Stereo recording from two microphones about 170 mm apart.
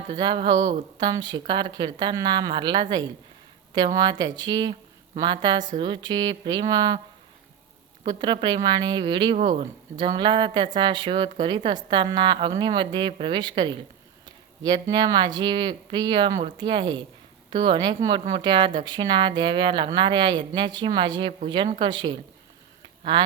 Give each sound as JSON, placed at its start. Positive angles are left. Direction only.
{"t": 0.1, "sound": "a woman's voice", "side_deg": -30}
{"t": 0.6, "sound": "speech", "side_deg": -40}
{"t": 0.9, "sound": "a woman's voice", "side_deg": -25}
{"t": 3.9, "sound": "a woman's voice", "side_deg": -25}
{"t": 8.0, "sound": "a woman's voice", "side_deg": -25}
{"t": 9.3, "sound": "speech", "side_deg": -40}
{"t": 10.0, "sound": "a woman's voice", "side_deg": -25}